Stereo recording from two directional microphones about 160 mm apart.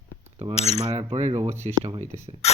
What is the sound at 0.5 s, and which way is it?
Cutlery, 40° left (ahead or behind).